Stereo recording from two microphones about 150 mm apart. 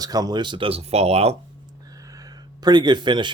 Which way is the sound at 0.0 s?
25° right (ahead or behind).